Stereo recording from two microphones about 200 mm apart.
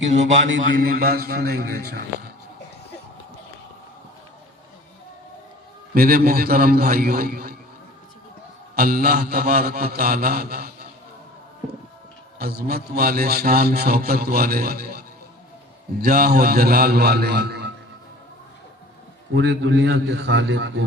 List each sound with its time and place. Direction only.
0.1 s a man's voice: 35° right (ahead or behind)
0.8 s a man's voice: 50° right (ahead or behind)
5.9 s a man's voice: 50° right (ahead or behind)
8.7 s a man's voice: 50° right (ahead or behind)
12.4 s a man's voice: 50° right (ahead or behind)
19.3 s a man's voice: 60° right (ahead or behind)